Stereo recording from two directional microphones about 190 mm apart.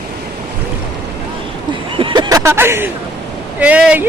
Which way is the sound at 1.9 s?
25° right (ahead or behind).